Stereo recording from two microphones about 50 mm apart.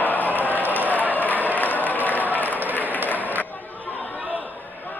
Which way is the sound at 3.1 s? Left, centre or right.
Left.